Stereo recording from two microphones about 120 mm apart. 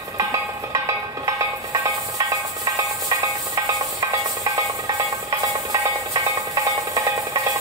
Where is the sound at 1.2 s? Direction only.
30° right (ahead or behind).